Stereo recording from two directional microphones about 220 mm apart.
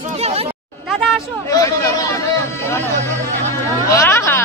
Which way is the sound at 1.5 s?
15° left (ahead or behind).